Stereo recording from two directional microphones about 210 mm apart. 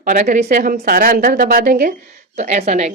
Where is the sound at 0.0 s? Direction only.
40° right (ahead or behind).